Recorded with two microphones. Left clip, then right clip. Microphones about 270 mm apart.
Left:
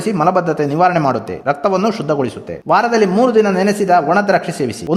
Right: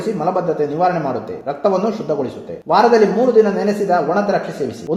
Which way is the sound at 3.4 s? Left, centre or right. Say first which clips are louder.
Left 3 dB; left.